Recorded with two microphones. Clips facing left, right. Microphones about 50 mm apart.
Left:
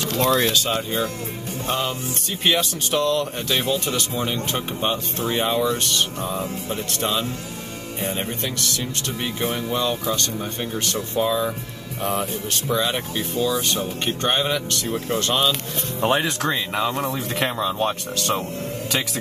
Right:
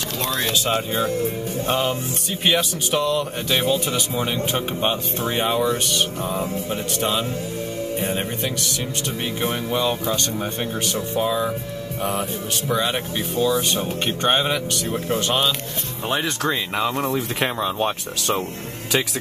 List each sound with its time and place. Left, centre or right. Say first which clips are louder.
0.5 s speech: right 1 dB; centre
2.4 s speech: even; centre; by 10.7 s right
10.9 s speech: left 1 dB; centre
16.2 s speech: even; centre